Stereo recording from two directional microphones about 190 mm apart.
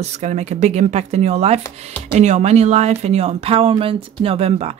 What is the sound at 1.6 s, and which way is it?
Speech, 10° left (ahead or behind).